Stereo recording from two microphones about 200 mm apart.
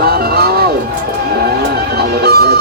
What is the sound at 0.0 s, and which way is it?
Music, 50° right (ahead or behind).